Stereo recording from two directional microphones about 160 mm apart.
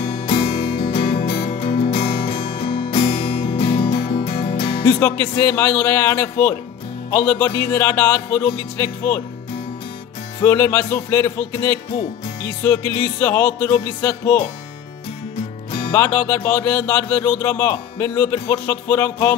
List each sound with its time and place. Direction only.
0.0 s music: 35° left (ahead or behind)
5.3 s speech: 15° left (ahead or behind)
10.4 s speech: 15° left (ahead or behind)
15.9 s speech: 15° left (ahead or behind)